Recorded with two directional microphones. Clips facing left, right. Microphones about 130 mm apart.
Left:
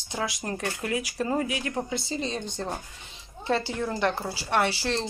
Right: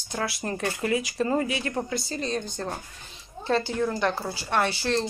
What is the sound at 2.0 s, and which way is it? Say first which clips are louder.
Speech: right 1 dB; 25° left (ahead or behind).